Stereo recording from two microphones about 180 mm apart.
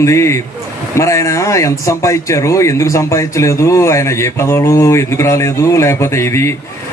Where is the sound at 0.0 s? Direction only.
15° left (ahead or behind).